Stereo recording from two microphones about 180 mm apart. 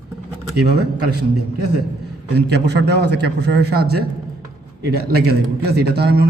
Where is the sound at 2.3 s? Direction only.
70° right (ahead or behind).